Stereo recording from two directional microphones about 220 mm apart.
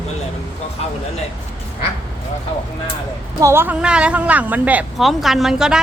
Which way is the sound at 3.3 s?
10° right (ahead or behind).